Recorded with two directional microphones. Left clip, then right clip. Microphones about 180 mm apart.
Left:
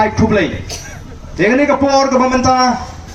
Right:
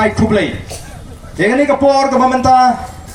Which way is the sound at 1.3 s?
65° right (ahead or behind).